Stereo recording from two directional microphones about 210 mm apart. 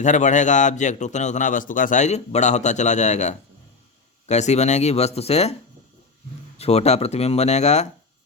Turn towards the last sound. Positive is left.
turn(degrees=30)  # may be behind; listen again after turning